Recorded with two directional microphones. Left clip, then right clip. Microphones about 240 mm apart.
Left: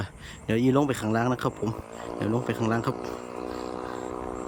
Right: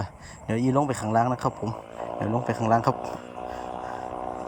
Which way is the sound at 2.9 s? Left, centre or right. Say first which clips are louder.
Right 2 dB; left.